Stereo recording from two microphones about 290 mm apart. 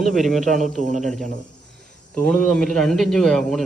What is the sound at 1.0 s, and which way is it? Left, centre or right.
A man's voice, centre.